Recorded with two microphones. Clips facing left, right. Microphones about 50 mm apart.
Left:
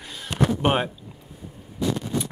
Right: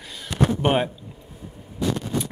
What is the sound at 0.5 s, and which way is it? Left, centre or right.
Speech, centre.